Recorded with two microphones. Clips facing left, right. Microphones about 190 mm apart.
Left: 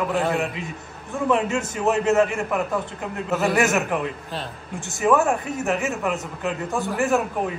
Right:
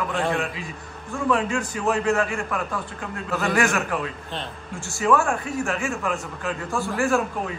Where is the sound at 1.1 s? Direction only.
20° left (ahead or behind).